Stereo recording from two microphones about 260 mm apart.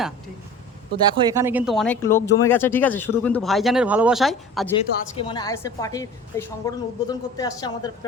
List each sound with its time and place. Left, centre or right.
1.1 s speech: centre
4.8 s a woman's voice: centre